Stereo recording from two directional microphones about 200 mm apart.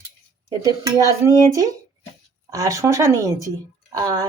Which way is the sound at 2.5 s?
15° right (ahead or behind).